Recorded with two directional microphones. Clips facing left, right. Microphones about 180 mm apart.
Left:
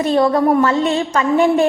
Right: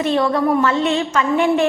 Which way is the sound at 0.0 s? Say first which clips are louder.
Left 3 dB; 40° left (ahead or behind).